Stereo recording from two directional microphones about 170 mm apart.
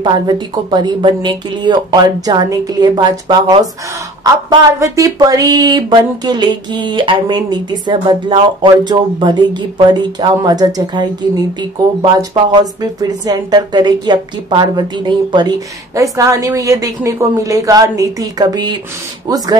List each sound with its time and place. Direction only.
0.0 s a woman's voice: 25° right (ahead or behind)